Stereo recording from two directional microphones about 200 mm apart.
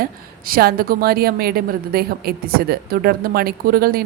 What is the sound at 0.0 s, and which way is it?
A woman's voice, 45° right (ahead or behind).